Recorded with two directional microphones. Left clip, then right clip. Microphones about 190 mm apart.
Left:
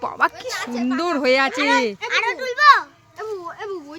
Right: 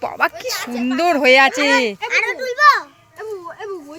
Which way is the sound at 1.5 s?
40° right (ahead or behind).